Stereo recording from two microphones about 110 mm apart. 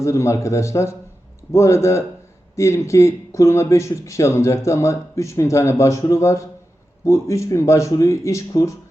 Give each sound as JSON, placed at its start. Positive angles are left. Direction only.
{"t": 0.0, "sound": "speech", "side_deg": 25}